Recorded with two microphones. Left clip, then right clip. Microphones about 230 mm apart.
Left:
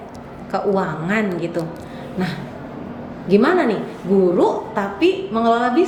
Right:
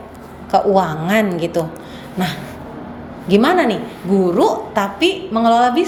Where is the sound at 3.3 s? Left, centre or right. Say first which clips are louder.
Right 2 dB; right.